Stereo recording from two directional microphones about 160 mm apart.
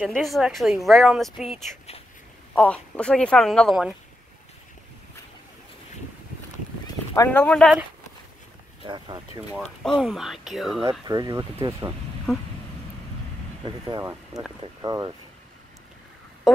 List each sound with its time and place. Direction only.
0.0 s speech: centre (ahead or behind)
7.2 s speech: 5° left (ahead or behind)
8.8 s speech: 30° right (ahead or behind)
9.6 s speech: 5° left (ahead or behind)
11.1 s speech: 25° right (ahead or behind)
13.8 s speech: 25° right (ahead or behind)
16.5 s speech: centre (ahead or behind)